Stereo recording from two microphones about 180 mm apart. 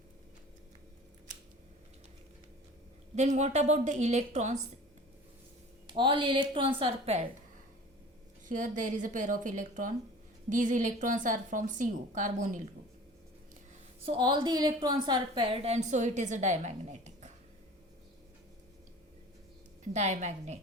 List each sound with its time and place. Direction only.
3.2 s a woman's voice: 40° right (ahead or behind)
5.9 s a woman's voice: 30° right (ahead or behind)
8.4 s a woman's voice: 45° right (ahead or behind)
14.0 s a woman's voice: 25° right (ahead or behind)
19.9 s a woman's voice: 40° right (ahead or behind)